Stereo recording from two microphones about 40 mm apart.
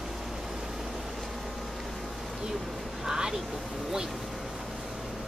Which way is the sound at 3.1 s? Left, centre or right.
Centre.